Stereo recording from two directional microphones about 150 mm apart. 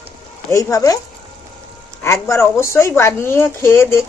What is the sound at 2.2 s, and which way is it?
Speech, 20° left (ahead or behind).